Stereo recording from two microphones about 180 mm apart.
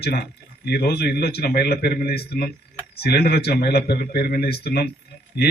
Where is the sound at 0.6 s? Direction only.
60° left (ahead or behind).